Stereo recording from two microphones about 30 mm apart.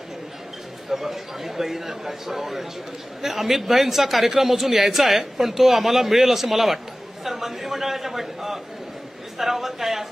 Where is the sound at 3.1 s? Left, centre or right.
Centre.